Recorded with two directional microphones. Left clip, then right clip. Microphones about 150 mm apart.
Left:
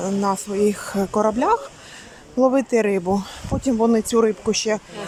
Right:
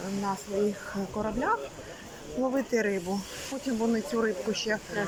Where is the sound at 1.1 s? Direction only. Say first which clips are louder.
Left 13 dB; 45° left (ahead or behind).